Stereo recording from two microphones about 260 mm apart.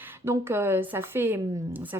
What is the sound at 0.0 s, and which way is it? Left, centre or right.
Speech, centre.